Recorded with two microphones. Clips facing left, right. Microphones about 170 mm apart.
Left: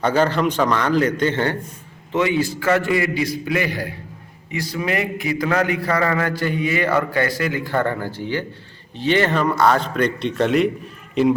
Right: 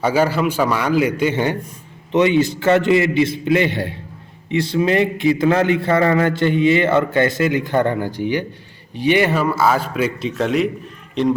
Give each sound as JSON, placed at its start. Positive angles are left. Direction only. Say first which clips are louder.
{"t": 0.0, "sound": "a man's voice", "louder": "right 1 dB", "side_deg": -10}